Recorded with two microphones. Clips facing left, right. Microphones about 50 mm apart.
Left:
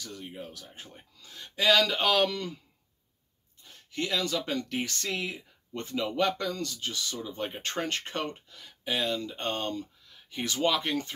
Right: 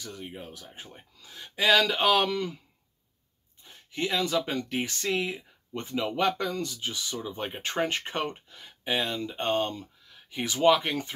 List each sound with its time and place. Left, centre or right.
0.0 s speech: right
3.6 s speech: centre